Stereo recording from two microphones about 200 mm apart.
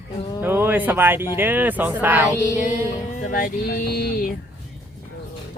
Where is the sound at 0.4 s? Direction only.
10° right (ahead or behind).